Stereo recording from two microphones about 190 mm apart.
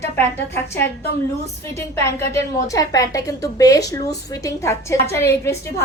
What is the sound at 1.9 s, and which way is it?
A woman's voice, 15° left (ahead or behind).